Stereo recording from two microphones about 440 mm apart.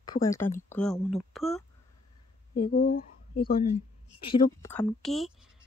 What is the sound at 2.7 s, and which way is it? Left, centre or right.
Speech, centre.